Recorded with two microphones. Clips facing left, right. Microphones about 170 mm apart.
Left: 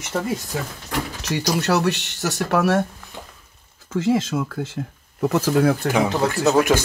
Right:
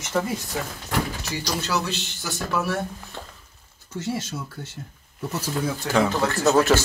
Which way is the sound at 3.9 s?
90° left.